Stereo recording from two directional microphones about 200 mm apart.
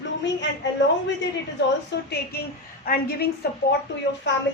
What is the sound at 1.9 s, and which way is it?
A woman's voice, 55° left (ahead or behind).